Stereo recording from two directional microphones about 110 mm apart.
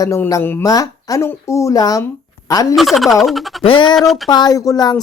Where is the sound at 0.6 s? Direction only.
30° left (ahead or behind).